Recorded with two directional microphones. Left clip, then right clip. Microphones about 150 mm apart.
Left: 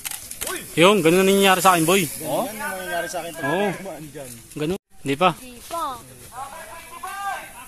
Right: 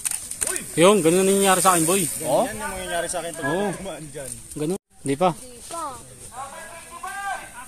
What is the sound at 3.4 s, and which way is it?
Speech, centre (ahead or behind).